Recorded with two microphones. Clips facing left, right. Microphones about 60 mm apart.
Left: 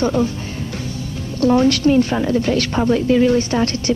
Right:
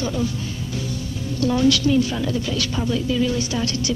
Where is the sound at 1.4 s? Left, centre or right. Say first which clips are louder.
Left 5 dB; left.